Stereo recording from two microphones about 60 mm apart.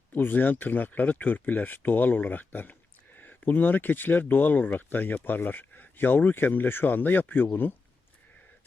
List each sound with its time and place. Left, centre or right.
0.2 s speech: left